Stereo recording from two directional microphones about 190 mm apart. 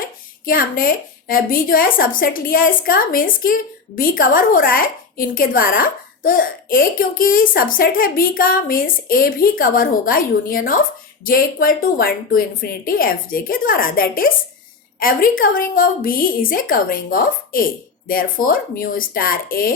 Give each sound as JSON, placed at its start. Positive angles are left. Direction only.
{"t": 0.0, "sound": "a woman's voice", "side_deg": 50}